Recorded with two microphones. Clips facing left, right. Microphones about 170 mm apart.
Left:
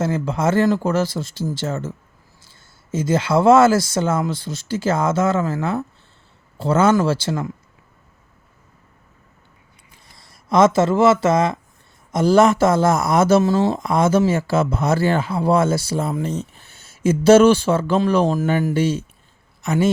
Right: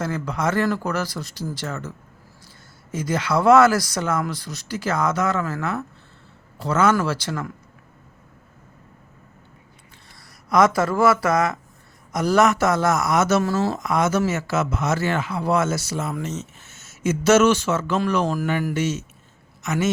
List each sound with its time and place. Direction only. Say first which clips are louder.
0.0 s speech: left 4 dB; 25° left (ahead or behind)
2.9 s speech: left 5 dB; 25° left (ahead or behind)
10.2 s speech: left 3 dB; 25° left (ahead or behind)